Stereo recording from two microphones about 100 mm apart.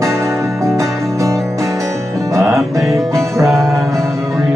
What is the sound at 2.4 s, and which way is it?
Music, 30° right (ahead or behind).